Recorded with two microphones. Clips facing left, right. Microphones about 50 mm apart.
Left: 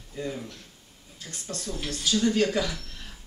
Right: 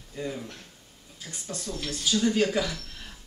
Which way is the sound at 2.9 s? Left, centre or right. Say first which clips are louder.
Even; centre.